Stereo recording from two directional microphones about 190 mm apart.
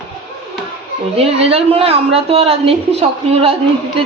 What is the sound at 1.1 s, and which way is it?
A woman's voice, 30° right (ahead or behind).